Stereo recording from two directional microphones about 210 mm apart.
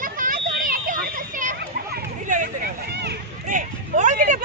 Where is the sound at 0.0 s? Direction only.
40° right (ahead or behind).